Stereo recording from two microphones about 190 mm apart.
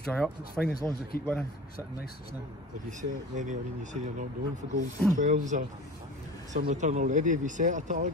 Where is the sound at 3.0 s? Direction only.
40° right (ahead or behind).